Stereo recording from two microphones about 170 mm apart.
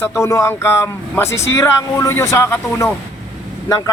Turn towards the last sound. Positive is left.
turn(degrees=20)  # may be behind; listen again after turning